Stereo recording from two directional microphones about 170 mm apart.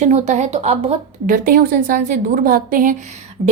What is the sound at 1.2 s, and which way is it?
A woman's voice, 55° right (ahead or behind).